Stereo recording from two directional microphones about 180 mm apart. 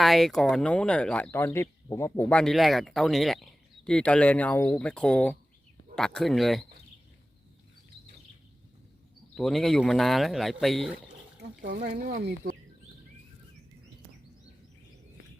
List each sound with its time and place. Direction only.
0.0 s speech: centre (ahead or behind)
9.3 s speech: centre (ahead or behind)
11.6 s speech: 50° right (ahead or behind)